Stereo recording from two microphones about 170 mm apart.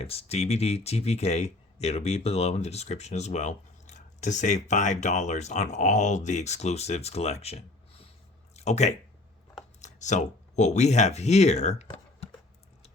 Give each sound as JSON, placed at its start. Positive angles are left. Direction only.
{"t": 0.0, "sound": "speech", "side_deg": 35}